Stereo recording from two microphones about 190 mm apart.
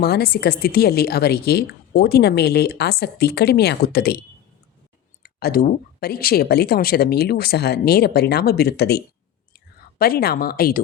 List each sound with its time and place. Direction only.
0.0 s a woman's voice: 55° left (ahead or behind)
5.2 s a woman's voice: 55° left (ahead or behind)